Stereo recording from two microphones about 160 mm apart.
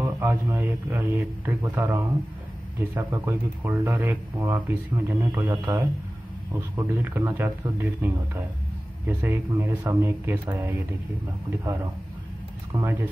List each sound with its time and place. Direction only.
0.0 s speech: 15° right (ahead or behind)
7.0 s a man's voice: 15° right (ahead or behind)